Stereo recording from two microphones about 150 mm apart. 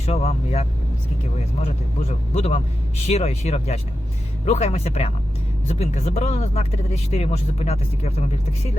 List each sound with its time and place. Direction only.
0.0 s speech: 45° left (ahead or behind)